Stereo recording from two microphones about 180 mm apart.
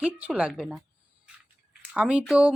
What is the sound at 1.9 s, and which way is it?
Speech, 5° right (ahead or behind).